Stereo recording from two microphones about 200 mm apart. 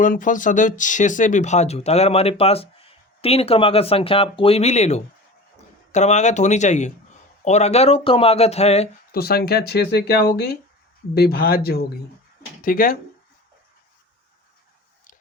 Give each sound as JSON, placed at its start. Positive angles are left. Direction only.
{"t": 0.0, "sound": "speech", "side_deg": 40}
{"t": 9.1, "sound": "speech", "side_deg": 50}